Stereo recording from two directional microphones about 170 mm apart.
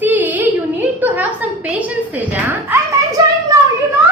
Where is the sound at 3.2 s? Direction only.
20° right (ahead or behind).